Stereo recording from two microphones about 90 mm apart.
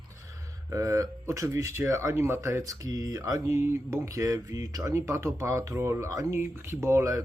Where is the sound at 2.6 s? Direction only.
40° right (ahead or behind).